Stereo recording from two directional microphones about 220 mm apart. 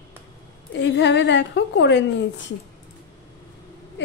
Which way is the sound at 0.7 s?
55° left (ahead or behind).